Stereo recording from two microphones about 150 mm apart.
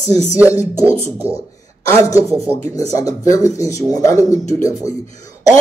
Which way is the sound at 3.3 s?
20° left (ahead or behind).